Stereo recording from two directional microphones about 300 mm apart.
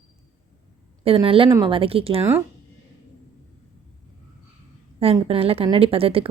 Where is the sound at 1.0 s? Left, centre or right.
Centre.